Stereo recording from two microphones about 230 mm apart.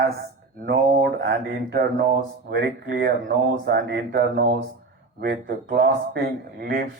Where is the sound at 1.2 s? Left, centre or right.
Right.